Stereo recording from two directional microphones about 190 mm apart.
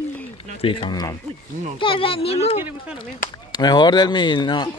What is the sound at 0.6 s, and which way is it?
Speech, 30° left (ahead or behind).